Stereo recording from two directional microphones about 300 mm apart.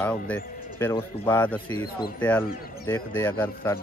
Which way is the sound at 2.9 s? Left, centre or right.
Centre.